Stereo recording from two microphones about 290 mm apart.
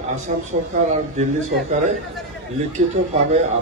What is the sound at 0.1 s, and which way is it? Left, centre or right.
A man's voice, right.